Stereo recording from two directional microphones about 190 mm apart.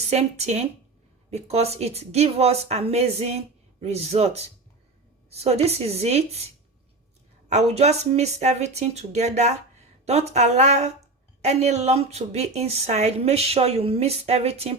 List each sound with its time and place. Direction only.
0.1 s a woman's voice: 35° right (ahead or behind)
7.4 s a woman's voice: 35° right (ahead or behind)